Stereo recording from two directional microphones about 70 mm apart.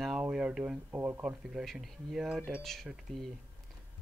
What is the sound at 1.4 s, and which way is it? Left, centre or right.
Speech, centre.